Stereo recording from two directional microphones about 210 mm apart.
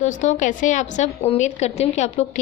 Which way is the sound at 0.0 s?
35° left (ahead or behind).